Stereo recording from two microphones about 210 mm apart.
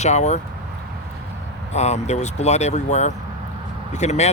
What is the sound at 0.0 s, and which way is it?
Speech, 30° left (ahead or behind).